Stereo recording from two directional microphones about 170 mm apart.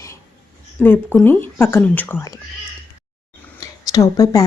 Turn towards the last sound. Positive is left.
turn(degrees=20)  # may be behind; listen again after turning